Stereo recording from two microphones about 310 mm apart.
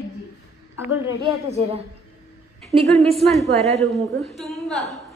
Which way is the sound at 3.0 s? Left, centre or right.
Centre.